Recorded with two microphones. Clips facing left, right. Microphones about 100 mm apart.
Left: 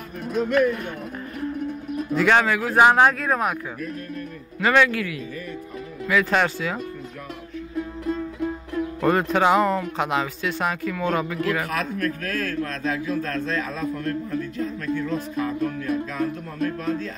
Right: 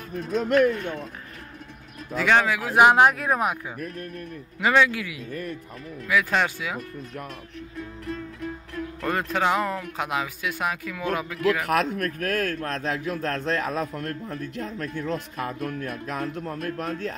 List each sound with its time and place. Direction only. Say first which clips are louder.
2.1 s speech: left 2 dB; centre (ahead or behind)
4.6 s speech: left 2 dB; 15° right (ahead or behind)
6.0 s speech: left 2 dB; 5° right (ahead or behind)
8.0 s music: left 6 dB; 20° left (ahead or behind)
9.0 s speech: left 5 dB; 5° left (ahead or behind)
11.6 s a man's voice: right 2 dB; 60° right (ahead or behind)